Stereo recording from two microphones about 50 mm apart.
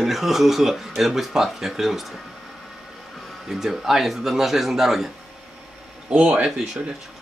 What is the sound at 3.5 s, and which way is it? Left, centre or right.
Speech, centre.